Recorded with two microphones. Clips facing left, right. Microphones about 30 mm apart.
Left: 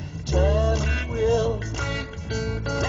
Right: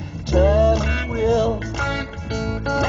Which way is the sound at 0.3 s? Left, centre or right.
Centre.